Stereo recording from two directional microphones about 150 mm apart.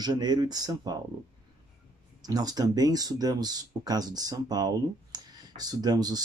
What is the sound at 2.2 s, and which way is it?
Speech, 25° right (ahead or behind).